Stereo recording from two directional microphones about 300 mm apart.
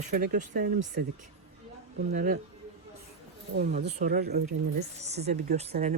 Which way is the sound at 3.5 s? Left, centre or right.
Right.